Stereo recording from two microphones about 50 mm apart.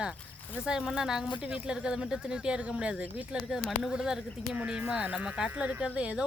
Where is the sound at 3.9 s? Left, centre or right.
Centre.